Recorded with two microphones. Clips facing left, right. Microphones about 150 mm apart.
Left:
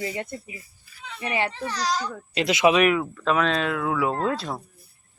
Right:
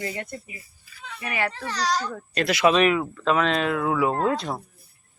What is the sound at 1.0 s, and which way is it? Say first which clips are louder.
Speech: left 1 dB; 25° left (ahead or behind).